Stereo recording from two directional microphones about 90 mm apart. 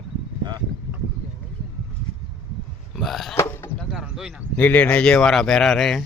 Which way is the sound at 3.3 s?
30° left (ahead or behind).